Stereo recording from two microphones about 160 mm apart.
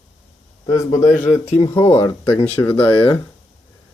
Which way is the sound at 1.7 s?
15° left (ahead or behind).